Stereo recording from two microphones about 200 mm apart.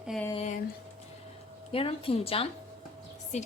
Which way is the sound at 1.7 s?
30° left (ahead or behind).